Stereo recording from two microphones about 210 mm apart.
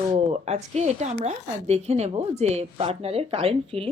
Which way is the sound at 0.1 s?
30° right (ahead or behind).